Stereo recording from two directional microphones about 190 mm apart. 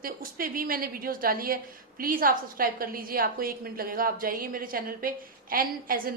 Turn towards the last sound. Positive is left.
turn(degrees=-50)  # may be behind; listen again after turning